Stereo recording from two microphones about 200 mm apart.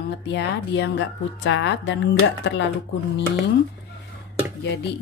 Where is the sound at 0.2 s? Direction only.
60° left (ahead or behind).